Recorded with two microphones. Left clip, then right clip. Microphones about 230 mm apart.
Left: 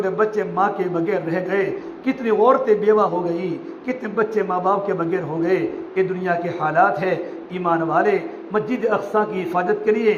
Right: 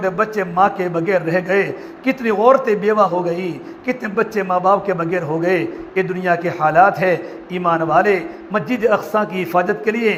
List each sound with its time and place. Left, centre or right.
0.0 s a man's voice: right